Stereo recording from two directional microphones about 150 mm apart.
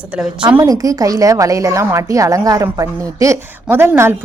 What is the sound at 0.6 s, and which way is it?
A woman's voice, 25° right (ahead or behind).